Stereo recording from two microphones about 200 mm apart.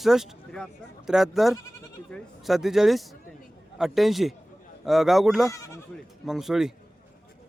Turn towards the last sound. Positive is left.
turn(degrees=0)  # may be behind; listen again after turning